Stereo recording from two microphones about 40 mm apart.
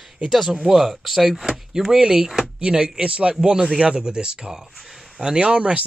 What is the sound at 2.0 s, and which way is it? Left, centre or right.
Speech, right.